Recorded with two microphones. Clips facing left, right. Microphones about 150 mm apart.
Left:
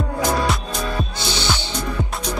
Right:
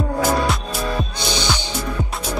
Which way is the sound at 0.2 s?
5° right (ahead or behind).